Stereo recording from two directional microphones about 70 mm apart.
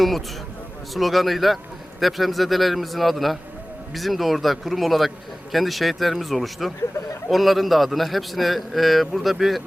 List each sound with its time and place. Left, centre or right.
0.9 s a man's voice: centre